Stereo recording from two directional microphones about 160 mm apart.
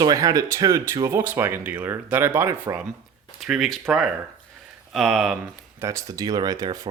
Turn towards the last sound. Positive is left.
turn(degrees=-25)  # may be behind; listen again after turning